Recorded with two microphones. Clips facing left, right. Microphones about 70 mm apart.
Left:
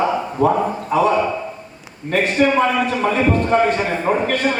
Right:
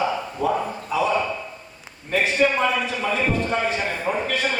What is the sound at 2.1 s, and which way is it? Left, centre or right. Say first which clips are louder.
A man's voice: left 4 dB; left.